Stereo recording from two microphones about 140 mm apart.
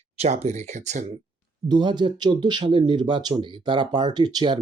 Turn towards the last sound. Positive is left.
turn(degrees=-30)  # may be behind; listen again after turning